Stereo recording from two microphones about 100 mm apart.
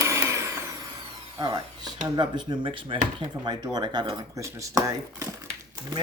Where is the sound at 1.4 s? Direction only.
45° right (ahead or behind).